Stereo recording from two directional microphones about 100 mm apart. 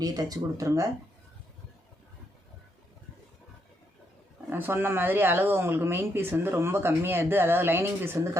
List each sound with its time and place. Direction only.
0.0 s speech: 40° right (ahead or behind)
4.4 s speech: 20° right (ahead or behind)